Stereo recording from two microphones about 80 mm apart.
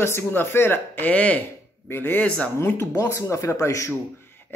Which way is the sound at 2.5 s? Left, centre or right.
Left.